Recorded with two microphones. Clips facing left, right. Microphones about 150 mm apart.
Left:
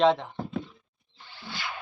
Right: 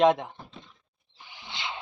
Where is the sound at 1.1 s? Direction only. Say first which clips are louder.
Left 2 dB; 15° right (ahead or behind).